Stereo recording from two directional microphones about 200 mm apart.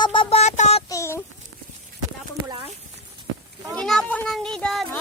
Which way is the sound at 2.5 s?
30° right (ahead or behind).